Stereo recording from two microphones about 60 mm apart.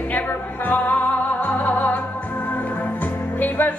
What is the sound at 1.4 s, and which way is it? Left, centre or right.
Music, left.